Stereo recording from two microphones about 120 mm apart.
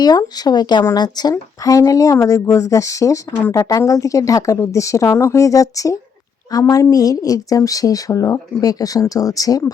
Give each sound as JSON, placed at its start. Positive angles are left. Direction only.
{"t": 0.0, "sound": "speech", "side_deg": 35}